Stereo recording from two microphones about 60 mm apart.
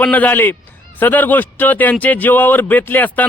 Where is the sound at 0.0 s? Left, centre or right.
Left.